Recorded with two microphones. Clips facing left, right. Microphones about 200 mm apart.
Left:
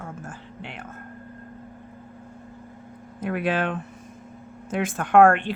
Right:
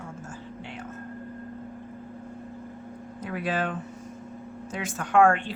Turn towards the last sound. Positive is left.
turn(degrees=55)  # may be behind; listen again after turning